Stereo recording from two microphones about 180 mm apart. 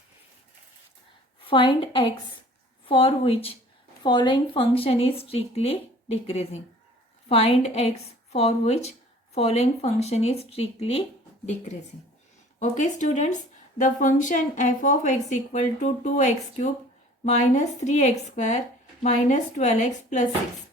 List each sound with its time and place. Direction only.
1.5 s a woman's voice: 30° left (ahead or behind)
12.5 s a woman's voice: 40° left (ahead or behind)